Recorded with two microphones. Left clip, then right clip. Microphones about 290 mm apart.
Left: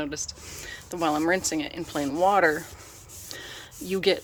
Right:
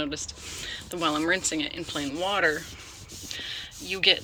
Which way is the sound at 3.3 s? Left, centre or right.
Left.